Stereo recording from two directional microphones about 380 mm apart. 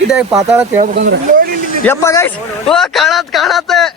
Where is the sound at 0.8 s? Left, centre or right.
Right.